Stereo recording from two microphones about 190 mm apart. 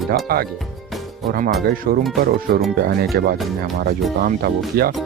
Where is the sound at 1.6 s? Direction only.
50° right (ahead or behind).